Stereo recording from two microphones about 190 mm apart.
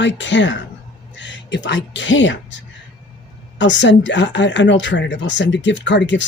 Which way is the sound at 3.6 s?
75° left (ahead or behind).